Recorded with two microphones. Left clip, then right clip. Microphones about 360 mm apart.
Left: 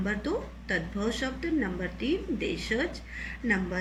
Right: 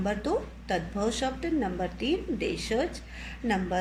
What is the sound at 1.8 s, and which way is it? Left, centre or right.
Speech, right.